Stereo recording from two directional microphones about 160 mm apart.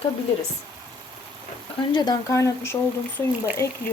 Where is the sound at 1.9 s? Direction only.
25° left (ahead or behind).